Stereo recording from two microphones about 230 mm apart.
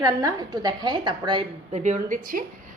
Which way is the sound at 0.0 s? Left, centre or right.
Centre.